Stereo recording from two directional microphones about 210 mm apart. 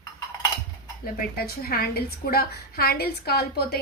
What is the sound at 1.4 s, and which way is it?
A woman's voice, 45° left (ahead or behind).